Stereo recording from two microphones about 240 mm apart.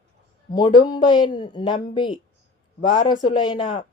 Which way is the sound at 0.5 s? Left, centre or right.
Centre.